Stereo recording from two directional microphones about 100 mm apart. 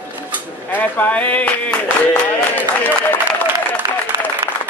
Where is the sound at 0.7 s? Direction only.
15° left (ahead or behind).